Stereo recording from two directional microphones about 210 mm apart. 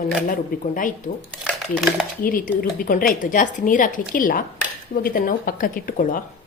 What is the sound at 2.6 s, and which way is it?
A woman's voice, 45° left (ahead or behind).